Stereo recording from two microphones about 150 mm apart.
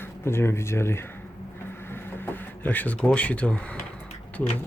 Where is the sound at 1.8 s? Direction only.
15° left (ahead or behind).